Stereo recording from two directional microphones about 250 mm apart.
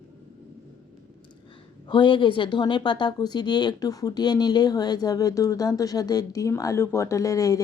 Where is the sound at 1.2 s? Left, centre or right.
Centre.